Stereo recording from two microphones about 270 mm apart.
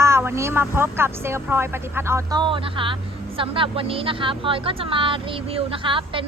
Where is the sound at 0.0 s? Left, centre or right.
Centre.